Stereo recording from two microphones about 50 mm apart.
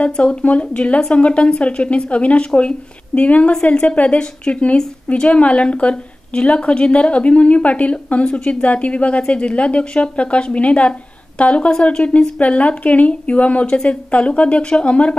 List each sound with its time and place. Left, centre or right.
0.0 s speech: left